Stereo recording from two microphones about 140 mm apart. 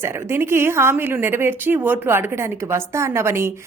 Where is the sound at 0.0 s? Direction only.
15° right (ahead or behind).